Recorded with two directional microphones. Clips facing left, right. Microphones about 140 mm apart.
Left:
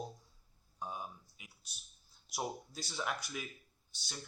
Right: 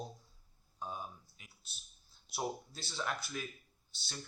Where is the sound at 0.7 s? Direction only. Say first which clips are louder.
Even; 15° left (ahead or behind).